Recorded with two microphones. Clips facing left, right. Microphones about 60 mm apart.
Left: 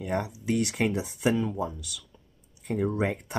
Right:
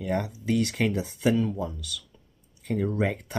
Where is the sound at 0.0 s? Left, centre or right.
Left.